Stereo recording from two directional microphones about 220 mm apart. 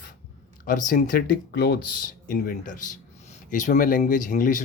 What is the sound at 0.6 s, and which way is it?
Speech, 35° left (ahead or behind).